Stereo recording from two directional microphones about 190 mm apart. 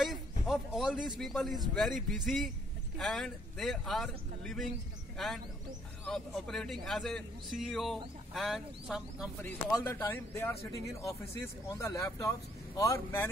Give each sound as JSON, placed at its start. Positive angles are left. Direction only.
{"t": 0.0, "sound": "a man's voice", "side_deg": 0}
{"t": 9.7, "sound": "speech", "side_deg": 15}